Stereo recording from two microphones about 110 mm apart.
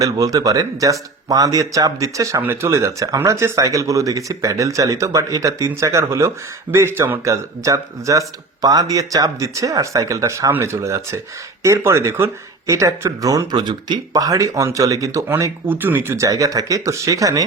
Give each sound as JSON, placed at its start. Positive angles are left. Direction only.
{"t": 0.0, "sound": "speech", "side_deg": -30}